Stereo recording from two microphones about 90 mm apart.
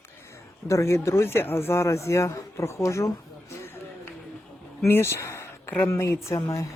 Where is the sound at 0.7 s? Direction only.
35° left (ahead or behind).